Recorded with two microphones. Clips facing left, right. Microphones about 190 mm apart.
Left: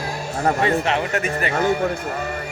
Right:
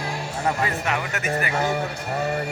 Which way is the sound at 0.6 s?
30° left (ahead or behind).